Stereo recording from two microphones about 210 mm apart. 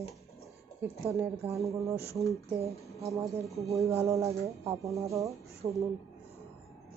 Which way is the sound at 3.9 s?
15° right (ahead or behind).